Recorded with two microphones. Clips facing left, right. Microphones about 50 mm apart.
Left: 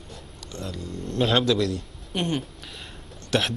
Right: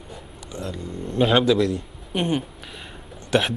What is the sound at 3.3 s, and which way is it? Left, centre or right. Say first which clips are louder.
Speech: right 4 dB; centre.